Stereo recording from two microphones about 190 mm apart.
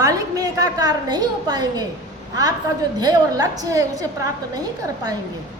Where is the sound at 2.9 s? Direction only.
20° right (ahead or behind).